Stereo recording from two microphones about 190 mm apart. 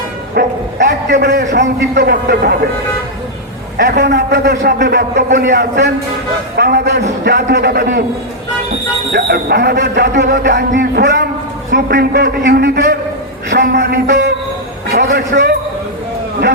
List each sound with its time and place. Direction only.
0.4 s a man's voice: 55° right (ahead or behind)
3.8 s a man's voice: 60° right (ahead or behind)
5.3 s a man's voice: 40° right (ahead or behind)
5.5 s a man's voice: 65° right (ahead or behind)
9.1 s a man's voice: 55° right (ahead or behind)
10.8 s a man's voice: 60° right (ahead or behind)
14.9 s a man's voice: 50° right (ahead or behind)